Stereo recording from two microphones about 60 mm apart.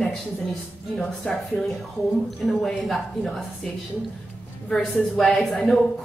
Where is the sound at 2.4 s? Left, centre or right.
Centre.